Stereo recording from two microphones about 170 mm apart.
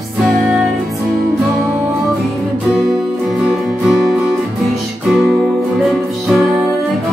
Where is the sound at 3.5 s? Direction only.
5° right (ahead or behind).